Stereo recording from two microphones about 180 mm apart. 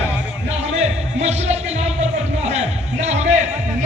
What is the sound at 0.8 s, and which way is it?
Music, 35° right (ahead or behind).